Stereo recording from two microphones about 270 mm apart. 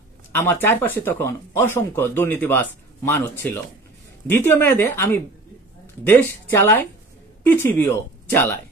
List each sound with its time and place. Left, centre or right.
0.3 s speech: centre